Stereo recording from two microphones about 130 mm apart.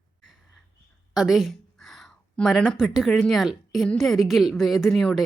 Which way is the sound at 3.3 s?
Centre (ahead or behind).